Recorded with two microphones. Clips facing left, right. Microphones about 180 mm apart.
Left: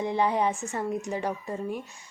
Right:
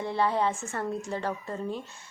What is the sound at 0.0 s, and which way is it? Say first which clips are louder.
Speech: left 2 dB; 15° left (ahead or behind).